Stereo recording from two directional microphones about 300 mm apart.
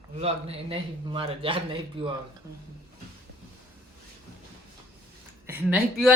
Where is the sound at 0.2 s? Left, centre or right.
Centre.